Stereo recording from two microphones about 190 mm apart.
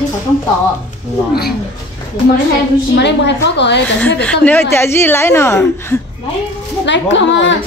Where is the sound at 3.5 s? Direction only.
65° left (ahead or behind).